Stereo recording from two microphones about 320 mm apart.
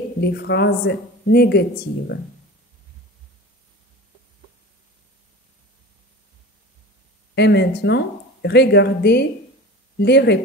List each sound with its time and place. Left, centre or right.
0.2 s speech: left
7.3 s speech: left